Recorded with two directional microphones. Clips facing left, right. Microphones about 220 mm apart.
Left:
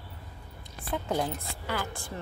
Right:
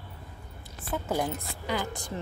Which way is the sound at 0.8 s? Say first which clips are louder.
Even; 5° right (ahead or behind).